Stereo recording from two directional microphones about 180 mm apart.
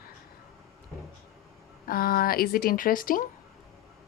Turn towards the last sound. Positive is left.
turn(degrees=50)  # may be behind; listen again after turning